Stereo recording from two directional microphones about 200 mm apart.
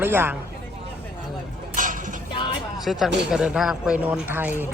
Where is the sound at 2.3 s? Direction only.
25° left (ahead or behind).